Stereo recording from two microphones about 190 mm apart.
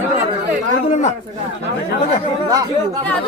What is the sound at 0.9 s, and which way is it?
Speech, 35° left (ahead or behind).